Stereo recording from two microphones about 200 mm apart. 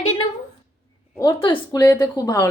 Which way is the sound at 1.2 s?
20° left (ahead or behind).